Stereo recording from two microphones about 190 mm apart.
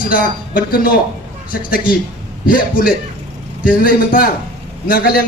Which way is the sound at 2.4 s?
45° left (ahead or behind).